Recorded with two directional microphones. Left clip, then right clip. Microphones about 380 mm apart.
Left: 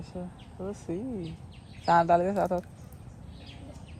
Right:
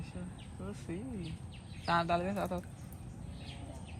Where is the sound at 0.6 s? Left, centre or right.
Centre.